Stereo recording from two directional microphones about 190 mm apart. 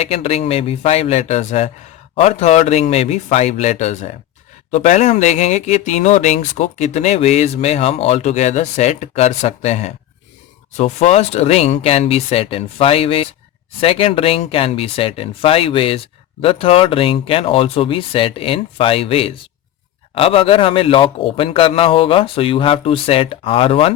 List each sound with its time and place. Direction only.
0.0 s speech: 30° left (ahead or behind)